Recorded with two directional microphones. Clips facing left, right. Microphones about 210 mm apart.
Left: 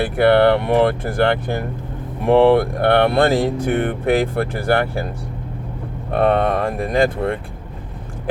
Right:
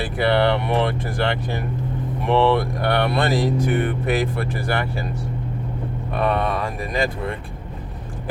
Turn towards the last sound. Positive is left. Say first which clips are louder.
# left 6 dB
turn(degrees=55)  # may be behind; listen again after turning